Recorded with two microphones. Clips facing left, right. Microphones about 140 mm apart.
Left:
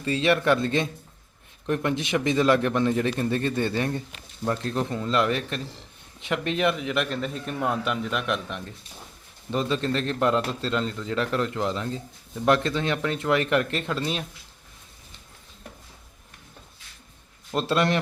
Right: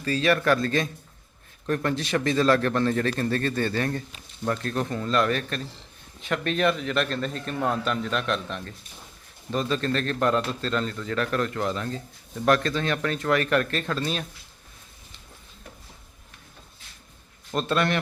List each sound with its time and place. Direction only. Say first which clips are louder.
0.0 s a man's voice: even; 25° left (ahead or behind)
17.5 s a man's voice: left 1 dB; 25° left (ahead or behind)